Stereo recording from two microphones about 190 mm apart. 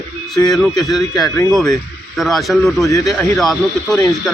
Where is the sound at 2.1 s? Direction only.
Centre (ahead or behind).